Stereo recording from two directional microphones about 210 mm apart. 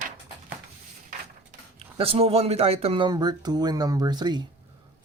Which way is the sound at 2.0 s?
30° right (ahead or behind).